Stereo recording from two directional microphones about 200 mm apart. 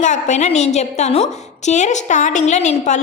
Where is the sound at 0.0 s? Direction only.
35° left (ahead or behind).